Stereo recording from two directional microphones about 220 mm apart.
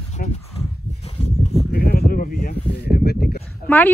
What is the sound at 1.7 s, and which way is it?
Sheep, 45° left (ahead or behind).